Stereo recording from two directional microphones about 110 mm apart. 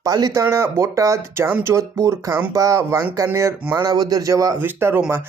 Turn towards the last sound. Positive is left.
turn(degrees=-20)  # may be behind; listen again after turning